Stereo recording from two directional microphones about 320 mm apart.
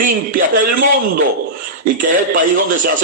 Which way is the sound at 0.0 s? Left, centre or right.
Right.